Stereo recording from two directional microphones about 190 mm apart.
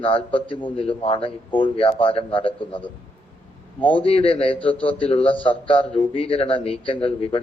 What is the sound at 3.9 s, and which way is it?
A man's voice, 30° left (ahead or behind).